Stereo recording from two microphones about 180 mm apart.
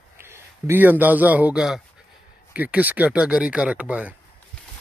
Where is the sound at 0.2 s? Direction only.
15° right (ahead or behind).